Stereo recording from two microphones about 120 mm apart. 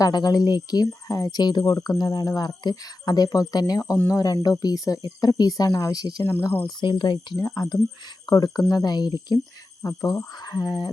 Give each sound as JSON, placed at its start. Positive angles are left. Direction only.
{"t": 0.0, "sound": "speech", "side_deg": 35}
{"t": 6.2, "sound": "speech", "side_deg": 20}
{"t": 6.7, "sound": "speech", "side_deg": 40}
{"t": 7.3, "sound": "speech", "side_deg": 25}